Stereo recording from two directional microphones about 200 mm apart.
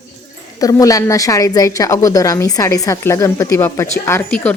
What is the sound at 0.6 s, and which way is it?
A woman's voice, 15° left (ahead or behind).